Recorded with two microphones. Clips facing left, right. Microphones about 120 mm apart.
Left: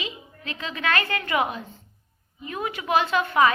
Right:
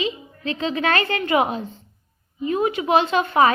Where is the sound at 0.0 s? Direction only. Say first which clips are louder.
Right 10 dB; 30° right (ahead or behind).